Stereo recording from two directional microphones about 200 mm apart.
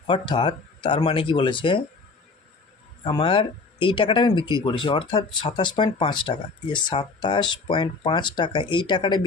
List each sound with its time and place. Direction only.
0.1 s speech: 25° left (ahead or behind)
3.0 s speech: 25° left (ahead or behind)